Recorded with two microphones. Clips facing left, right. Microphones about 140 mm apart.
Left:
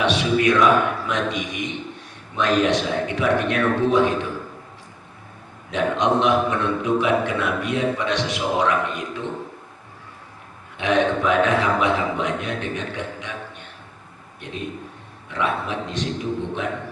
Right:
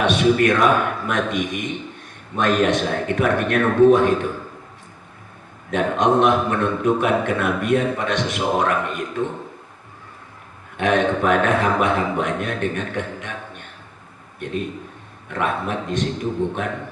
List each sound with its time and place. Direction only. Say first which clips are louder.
0.0 s a man's voice: right 3 dB; 50° right (ahead or behind)
5.7 s a man's voice: right 2 dB; 50° right (ahead or behind)
10.8 s a man's voice: right 1 dB; 50° right (ahead or behind)